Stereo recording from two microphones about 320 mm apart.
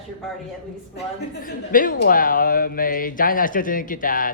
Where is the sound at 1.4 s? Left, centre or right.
Left.